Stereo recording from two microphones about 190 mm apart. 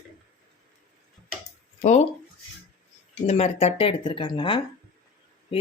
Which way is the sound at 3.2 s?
35° left (ahead or behind).